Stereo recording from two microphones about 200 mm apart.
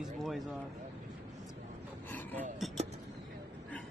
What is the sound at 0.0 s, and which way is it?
Speech, centre (ahead or behind).